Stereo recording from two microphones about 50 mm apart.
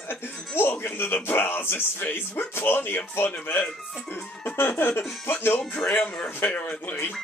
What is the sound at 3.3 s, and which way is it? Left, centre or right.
Speech, left.